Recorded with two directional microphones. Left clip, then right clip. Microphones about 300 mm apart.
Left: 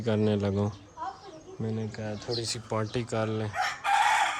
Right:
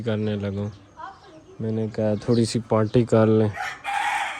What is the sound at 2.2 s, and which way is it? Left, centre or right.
Speech, centre.